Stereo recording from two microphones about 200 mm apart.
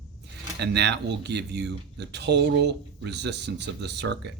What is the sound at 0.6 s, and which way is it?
Speech, 55° right (ahead or behind).